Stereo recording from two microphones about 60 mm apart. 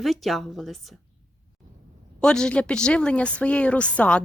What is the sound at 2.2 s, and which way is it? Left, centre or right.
Speech, centre.